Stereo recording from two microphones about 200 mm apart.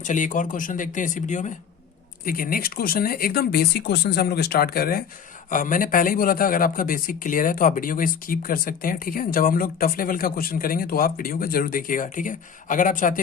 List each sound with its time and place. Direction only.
0.0 s speech: 40° left (ahead or behind)